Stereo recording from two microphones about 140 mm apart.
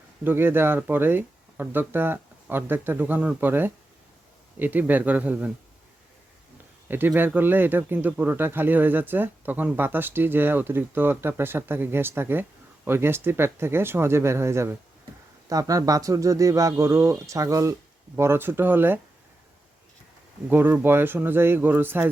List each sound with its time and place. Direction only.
0.3 s speech: 15° right (ahead or behind)
6.8 s speech: 15° right (ahead or behind)
20.5 s speech: 15° right (ahead or behind)